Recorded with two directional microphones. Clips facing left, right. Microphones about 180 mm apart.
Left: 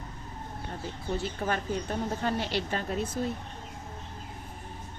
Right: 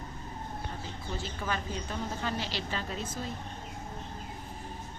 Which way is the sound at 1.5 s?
50° left (ahead or behind).